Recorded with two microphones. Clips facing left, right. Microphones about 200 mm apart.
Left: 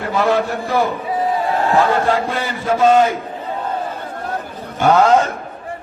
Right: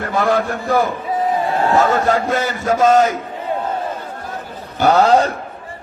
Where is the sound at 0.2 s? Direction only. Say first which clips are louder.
Even; 45° right (ahead or behind).